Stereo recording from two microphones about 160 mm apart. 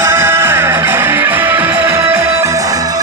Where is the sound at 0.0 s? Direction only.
15° right (ahead or behind).